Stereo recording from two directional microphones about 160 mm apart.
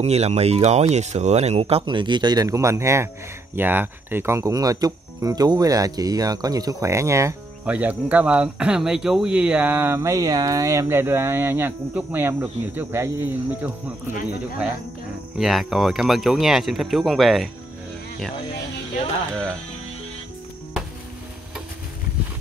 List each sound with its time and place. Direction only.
0.0 s speech: 40° right (ahead or behind); by 13.7 s 15° right (ahead or behind)
15.3 s speech: centre (ahead or behind)